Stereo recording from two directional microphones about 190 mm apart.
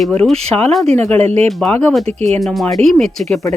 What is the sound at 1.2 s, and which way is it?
Speech, 35° right (ahead or behind).